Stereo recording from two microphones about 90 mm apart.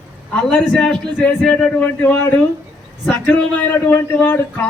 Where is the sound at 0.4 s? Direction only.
5° left (ahead or behind).